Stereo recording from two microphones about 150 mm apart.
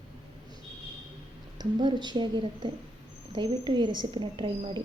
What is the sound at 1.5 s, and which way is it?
A woman's voice, 30° right (ahead or behind).